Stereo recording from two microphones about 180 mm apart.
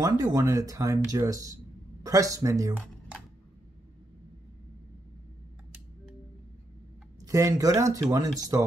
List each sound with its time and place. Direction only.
0.0 s speech: 20° right (ahead or behind)
7.2 s speech: 15° right (ahead or behind)